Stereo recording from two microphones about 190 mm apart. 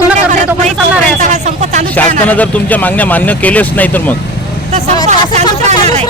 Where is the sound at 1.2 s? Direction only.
40° right (ahead or behind).